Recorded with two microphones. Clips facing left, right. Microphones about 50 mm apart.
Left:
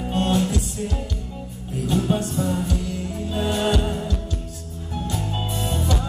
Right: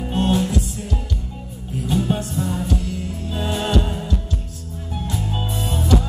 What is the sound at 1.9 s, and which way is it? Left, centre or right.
Music, centre.